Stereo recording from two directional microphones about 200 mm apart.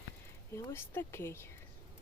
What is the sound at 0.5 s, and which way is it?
Speech, 10° left (ahead or behind).